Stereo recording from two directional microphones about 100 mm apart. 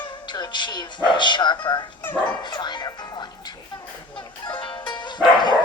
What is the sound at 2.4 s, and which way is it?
Music, 50° left (ahead or behind).